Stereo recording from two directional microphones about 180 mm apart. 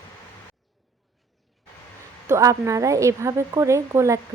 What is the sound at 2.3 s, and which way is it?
Speech, 15° right (ahead or behind).